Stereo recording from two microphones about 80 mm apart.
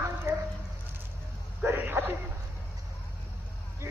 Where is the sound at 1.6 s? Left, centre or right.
Right.